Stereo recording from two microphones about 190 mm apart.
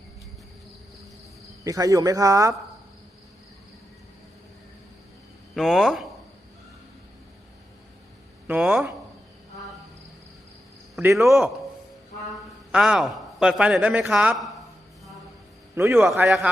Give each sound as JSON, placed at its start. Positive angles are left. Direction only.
{"t": 1.6, "sound": "speech", "side_deg": -20}
{"t": 5.5, "sound": "a man's voice", "side_deg": 0}
{"t": 8.4, "sound": "speech", "side_deg": -10}
{"t": 11.0, "sound": "speech", "side_deg": -15}
{"t": 12.7, "sound": "a man's voice", "side_deg": -5}
{"t": 15.7, "sound": "a man's voice", "side_deg": -15}